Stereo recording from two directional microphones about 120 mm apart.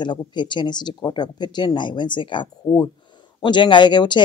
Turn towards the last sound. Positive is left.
turn(degrees=40)  # may be behind; listen again after turning